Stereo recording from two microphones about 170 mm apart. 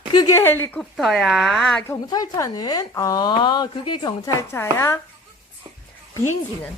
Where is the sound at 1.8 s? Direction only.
20° left (ahead or behind).